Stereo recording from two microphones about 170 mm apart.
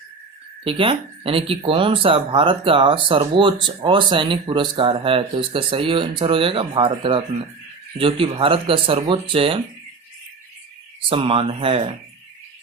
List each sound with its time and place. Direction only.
0.6 s speech: 30° right (ahead or behind)
11.1 s speech: 30° right (ahead or behind)